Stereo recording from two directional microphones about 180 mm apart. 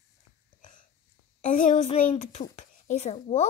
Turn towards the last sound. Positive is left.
turn(degrees=40)  # may be behind; listen again after turning